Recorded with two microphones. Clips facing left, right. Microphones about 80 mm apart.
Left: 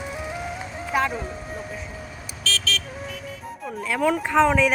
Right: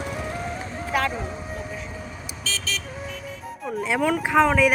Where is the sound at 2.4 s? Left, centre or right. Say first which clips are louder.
Left 4 dB; centre.